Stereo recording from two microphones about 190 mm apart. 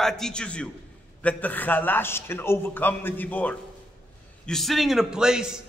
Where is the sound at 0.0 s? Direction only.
5° left (ahead or behind).